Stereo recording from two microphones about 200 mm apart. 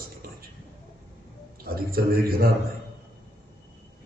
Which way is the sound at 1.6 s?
50° right (ahead or behind).